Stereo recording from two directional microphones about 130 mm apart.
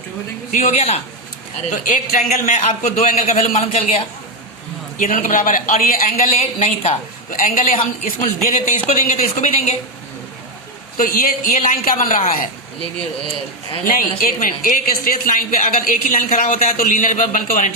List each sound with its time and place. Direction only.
0.5 s a man's voice: 55° left (ahead or behind)
1.7 s a man's voice: 75° left (ahead or behind); by 4.0 s 55° left (ahead or behind)
4.9 s a man's voice: 80° left
6.6 s a woman's voice: 60° left (ahead or behind); by 7.8 s 90° left
8.2 s speech: 75° left (ahead or behind)
10.9 s a woman's voice: 90° left
13.8 s a woman's voice: 90° left